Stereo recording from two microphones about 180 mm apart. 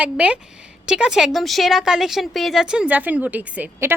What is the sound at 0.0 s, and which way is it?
Speech, 5° right (ahead or behind).